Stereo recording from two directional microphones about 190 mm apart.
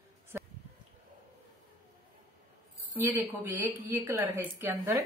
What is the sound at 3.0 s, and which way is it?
A woman's voice, 10° right (ahead or behind).